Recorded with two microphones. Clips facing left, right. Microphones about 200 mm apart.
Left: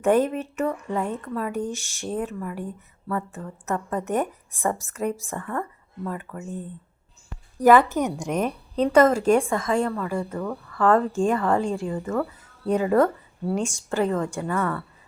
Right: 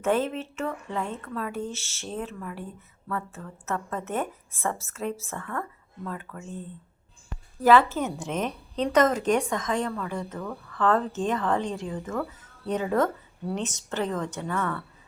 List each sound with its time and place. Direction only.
0.0 s speech: 15° left (ahead or behind)
7.6 s speech: 15° left (ahead or behind)